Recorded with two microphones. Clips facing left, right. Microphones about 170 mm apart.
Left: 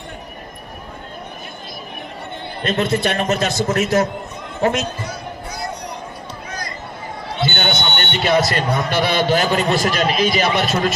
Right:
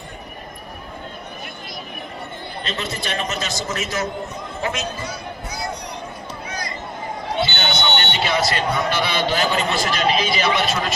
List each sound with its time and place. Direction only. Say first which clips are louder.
2.6 s a man's voice: left 10 dB; 55° left (ahead or behind)
7.4 s a man's voice: left 5 dB; 50° left (ahead or behind)